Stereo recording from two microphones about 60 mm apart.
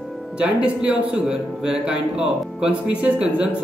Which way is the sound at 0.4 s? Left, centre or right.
Centre.